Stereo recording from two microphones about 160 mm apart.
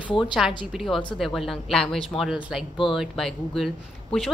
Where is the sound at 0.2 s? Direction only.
Centre (ahead or behind).